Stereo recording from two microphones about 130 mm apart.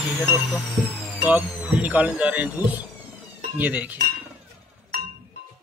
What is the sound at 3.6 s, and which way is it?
Cutlery, 15° right (ahead or behind).